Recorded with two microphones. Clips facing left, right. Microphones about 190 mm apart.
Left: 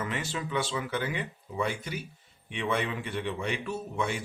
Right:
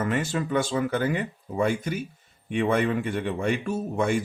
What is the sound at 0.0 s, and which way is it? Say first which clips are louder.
Speech: right 7 dB; 45° right (ahead or behind).